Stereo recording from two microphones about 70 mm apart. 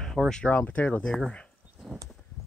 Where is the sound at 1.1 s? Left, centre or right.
Centre.